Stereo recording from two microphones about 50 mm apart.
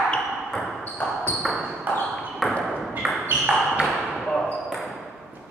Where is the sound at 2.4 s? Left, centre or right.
Centre.